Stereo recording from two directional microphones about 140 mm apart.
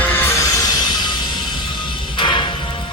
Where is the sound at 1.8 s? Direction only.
35° left (ahead or behind).